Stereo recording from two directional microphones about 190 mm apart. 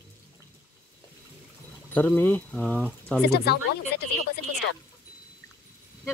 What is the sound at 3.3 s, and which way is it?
Speech, 60° left (ahead or behind).